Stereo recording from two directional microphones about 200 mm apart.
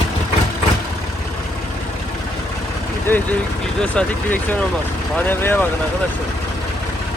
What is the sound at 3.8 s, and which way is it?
Speech, 5° left (ahead or behind).